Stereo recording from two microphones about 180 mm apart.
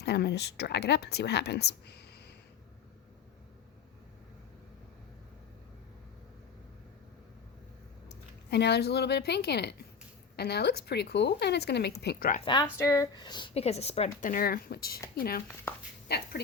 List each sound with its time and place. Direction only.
0.0 s speech: 65° left (ahead or behind)
8.4 s a woman's voice: 65° left (ahead or behind)
12.8 s speech: 20° left (ahead or behind); by 16.4 s 60° left (ahead or behind)